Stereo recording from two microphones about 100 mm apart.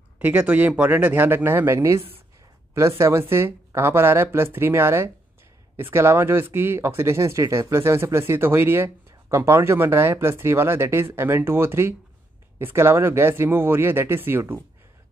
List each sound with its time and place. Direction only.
0.2 s speech: 15° right (ahead or behind)
3.0 s speech: 25° right (ahead or behind)